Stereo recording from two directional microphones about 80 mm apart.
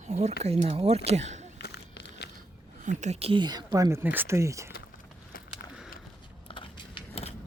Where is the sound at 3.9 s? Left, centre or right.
Right.